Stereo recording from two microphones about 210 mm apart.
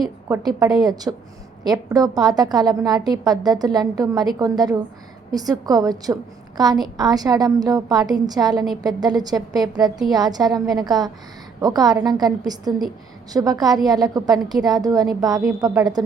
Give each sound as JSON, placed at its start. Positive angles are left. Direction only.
{"t": 0.3, "sound": "a woman's voice", "side_deg": -15}